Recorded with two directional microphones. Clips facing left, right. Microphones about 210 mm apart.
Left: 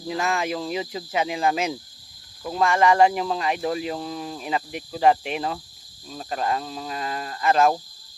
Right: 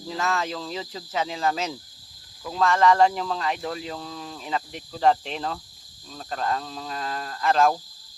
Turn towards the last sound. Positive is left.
turn(degrees=5)  # may be behind; listen again after turning